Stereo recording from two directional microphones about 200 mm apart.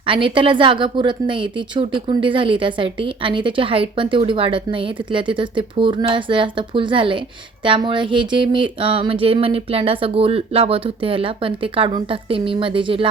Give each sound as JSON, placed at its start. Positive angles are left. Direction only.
{"t": 0.0, "sound": "a woman's voice", "side_deg": -25}